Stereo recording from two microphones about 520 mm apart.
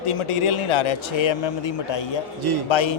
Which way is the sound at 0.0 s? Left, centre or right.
Left.